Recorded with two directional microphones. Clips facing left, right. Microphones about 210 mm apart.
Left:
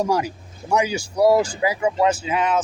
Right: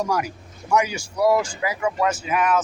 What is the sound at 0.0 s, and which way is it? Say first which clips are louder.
Speech: left 3 dB; 30° left (ahead or behind).